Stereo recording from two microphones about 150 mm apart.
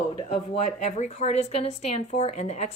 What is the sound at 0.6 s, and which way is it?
Speech, 50° left (ahead or behind).